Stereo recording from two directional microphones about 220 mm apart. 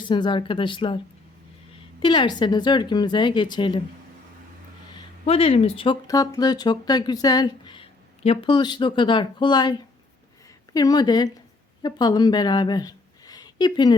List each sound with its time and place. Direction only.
0.0 s speech: 20° left (ahead or behind)
2.0 s speech: 20° left (ahead or behind)
5.2 s speech: 25° left (ahead or behind)